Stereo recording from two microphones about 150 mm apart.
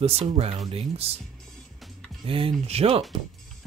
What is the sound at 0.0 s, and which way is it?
Speech, 40° right (ahead or behind).